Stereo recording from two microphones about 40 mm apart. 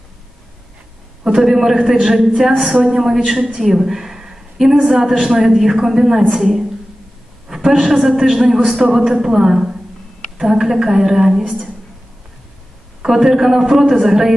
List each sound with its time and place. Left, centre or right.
1.2 s a woman's voice: centre
3.7 s a sound: centre
4.8 s a woman's voice: centre
7.4 s a sound: centre
8.1 s a woman's voice: centre
13.0 s a woman's voice: centre